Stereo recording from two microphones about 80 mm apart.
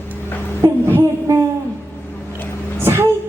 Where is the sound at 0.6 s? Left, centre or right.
Right.